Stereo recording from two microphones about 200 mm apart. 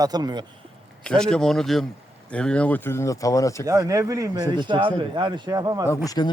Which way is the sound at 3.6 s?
15° right (ahead or behind).